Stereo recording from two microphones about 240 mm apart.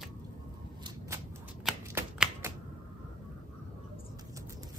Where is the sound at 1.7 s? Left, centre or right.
Centre.